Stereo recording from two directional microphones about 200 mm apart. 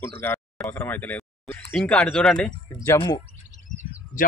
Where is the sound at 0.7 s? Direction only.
10° left (ahead or behind).